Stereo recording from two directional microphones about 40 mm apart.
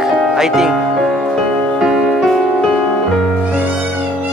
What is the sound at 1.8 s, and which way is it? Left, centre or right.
Music, centre.